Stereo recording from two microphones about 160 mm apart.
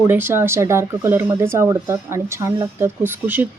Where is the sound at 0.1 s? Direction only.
15° right (ahead or behind).